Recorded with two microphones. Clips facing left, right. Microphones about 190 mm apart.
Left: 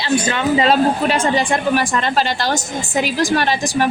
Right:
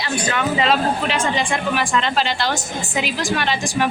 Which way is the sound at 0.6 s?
40° left (ahead or behind).